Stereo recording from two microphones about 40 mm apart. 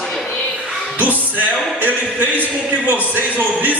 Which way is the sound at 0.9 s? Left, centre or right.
Right.